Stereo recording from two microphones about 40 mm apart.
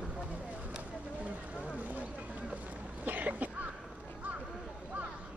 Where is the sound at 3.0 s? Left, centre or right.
Right.